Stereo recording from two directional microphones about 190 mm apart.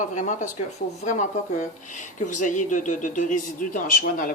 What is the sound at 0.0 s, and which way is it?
Speech, 40° left (ahead or behind).